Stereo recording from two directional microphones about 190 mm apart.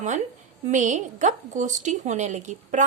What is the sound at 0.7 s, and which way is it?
A woman's voice, 40° right (ahead or behind).